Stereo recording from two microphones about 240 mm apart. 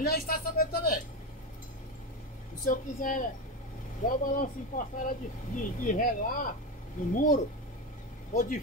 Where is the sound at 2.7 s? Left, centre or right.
Left.